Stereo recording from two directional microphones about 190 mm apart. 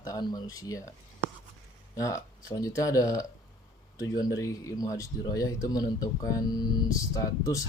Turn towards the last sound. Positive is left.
turn(degrees=15)  # may be behind; listen again after turning